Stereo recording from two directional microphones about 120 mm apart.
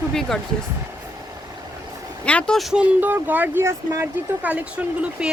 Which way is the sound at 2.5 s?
5° right (ahead or behind).